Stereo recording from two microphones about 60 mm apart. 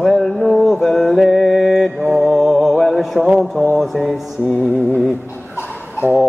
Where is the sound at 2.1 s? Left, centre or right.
Centre.